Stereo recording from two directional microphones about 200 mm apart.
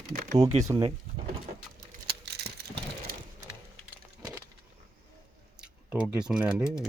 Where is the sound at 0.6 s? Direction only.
15° right (ahead or behind).